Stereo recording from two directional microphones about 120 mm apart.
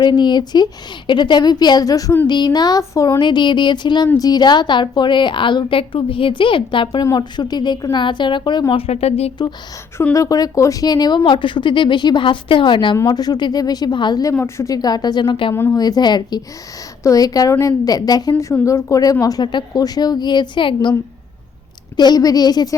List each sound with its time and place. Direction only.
0.0 s speech: 40° left (ahead or behind)
3.2 s speech: 40° left (ahead or behind)
8.9 s a woman's voice: 60° left (ahead or behind)
10.0 s speech: 25° left (ahead or behind)
14.3 s speech: 20° left (ahead or behind); by 20.9 s 40° left (ahead or behind)
21.9 s speech: 35° left (ahead or behind)